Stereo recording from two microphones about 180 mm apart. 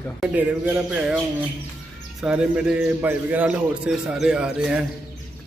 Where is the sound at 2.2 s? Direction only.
5° right (ahead or behind).